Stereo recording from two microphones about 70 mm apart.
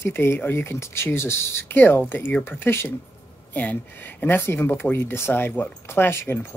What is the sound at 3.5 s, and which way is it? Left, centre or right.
Speech, left.